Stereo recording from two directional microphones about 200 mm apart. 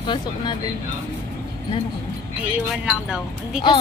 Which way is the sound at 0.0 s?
25° left (ahead or behind).